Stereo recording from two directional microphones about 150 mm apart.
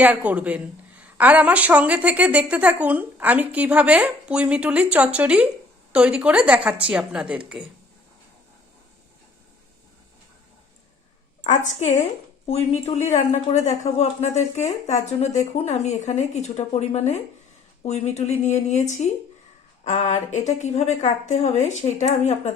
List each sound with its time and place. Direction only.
0.0 s a woman's voice: 10° right (ahead or behind)
11.4 s speech: 55° left (ahead or behind)
12.5 s speech: 45° left (ahead or behind)